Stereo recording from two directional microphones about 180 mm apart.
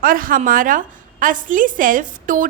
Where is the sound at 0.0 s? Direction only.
50° right (ahead or behind).